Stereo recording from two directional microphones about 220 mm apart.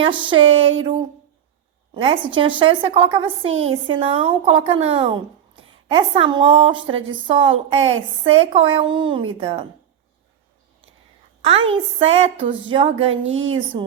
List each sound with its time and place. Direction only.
0.0 s a woman's voice: 20° right (ahead or behind)
11.4 s a woman's voice: 25° right (ahead or behind)
13.2 s a woman's voice: 60° right (ahead or behind)